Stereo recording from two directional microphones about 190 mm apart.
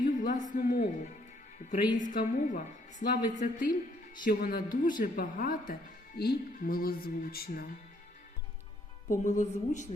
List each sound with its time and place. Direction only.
0.0 s a sound: 45° left (ahead or behind)
2.0 s speech: 45° left (ahead or behind)
9.0 s a woman's voice: 40° left (ahead or behind)